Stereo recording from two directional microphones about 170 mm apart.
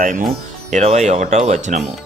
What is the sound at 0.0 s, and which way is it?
Speech, 50° right (ahead or behind).